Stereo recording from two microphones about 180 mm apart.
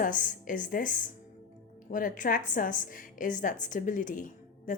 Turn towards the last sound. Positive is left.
turn(degrees=45)  # may be behind; listen again after turning